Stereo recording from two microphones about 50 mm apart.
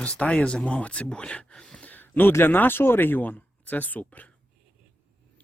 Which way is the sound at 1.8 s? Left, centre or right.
Left.